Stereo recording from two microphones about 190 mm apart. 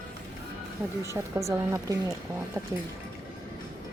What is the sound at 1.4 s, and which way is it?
Speech, 15° right (ahead or behind).